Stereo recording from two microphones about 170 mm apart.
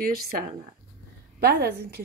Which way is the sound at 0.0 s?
60° right (ahead or behind).